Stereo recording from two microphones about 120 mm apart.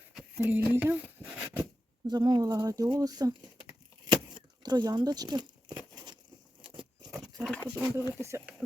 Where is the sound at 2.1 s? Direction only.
35° right (ahead or behind).